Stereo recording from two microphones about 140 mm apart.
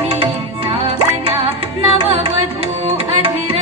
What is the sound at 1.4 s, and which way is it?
Music, 40° right (ahead or behind).